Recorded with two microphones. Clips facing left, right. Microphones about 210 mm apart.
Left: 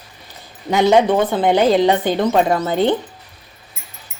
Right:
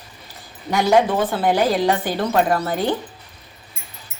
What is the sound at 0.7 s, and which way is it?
Speech, 20° left (ahead or behind).